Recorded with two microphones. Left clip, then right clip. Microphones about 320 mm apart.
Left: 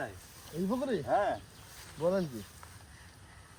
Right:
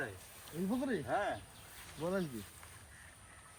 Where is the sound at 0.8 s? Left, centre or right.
Left.